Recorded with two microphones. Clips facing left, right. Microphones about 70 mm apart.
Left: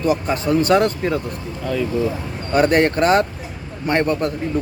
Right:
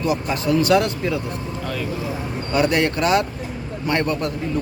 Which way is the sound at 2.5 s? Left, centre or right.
Left.